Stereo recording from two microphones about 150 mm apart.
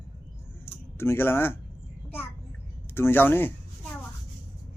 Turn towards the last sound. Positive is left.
turn(degrees=15)  # may be behind; listen again after turning